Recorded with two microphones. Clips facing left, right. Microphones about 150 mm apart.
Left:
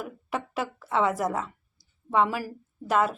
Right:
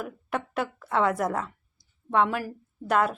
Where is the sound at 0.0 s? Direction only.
Centre (ahead or behind).